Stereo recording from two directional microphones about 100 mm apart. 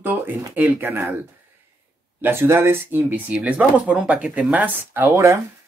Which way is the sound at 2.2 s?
25° right (ahead or behind).